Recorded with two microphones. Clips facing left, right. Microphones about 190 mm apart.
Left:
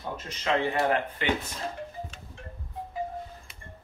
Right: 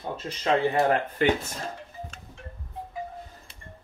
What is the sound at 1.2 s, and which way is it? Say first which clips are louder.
Speech: right 9 dB; 45° right (ahead or behind).